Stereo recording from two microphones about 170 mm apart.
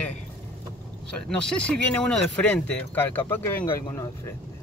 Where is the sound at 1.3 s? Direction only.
5° left (ahead or behind).